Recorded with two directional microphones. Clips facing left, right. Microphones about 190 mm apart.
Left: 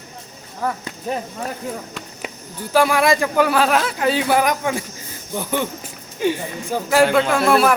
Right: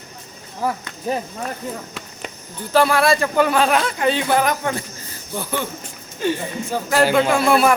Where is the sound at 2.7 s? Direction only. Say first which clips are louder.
Even; 15° left (ahead or behind).